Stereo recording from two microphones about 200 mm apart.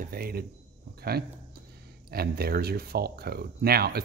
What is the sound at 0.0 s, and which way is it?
Speech, 45° right (ahead or behind).